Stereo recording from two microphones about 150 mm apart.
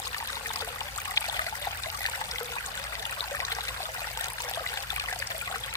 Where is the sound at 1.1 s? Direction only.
25° left (ahead or behind).